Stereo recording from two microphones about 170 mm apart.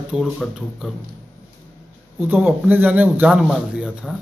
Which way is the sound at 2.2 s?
10° right (ahead or behind).